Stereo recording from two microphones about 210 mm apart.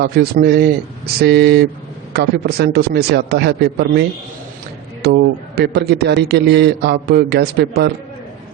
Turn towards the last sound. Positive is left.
turn(degrees=-50)  # may be behind; listen again after turning